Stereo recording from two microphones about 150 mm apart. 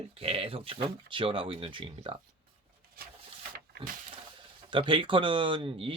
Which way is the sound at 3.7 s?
90° right.